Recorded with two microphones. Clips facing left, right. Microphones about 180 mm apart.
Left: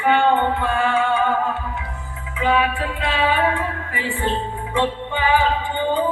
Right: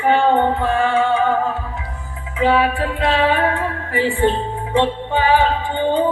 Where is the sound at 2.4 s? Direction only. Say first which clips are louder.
Right 4 dB; 35° right (ahead or behind).